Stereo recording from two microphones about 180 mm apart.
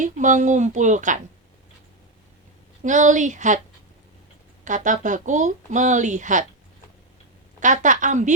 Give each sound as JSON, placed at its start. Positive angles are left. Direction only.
{"t": 0.0, "sound": "speech", "side_deg": -45}
{"t": 2.8, "sound": "speech", "side_deg": -45}
{"t": 4.6, "sound": "speech", "side_deg": -45}
{"t": 7.6, "sound": "speech", "side_deg": -45}